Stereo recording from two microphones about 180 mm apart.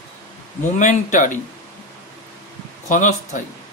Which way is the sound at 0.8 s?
45° left (ahead or behind).